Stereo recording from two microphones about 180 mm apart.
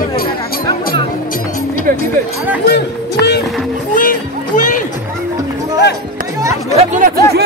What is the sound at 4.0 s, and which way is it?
Speech, 50° left (ahead or behind).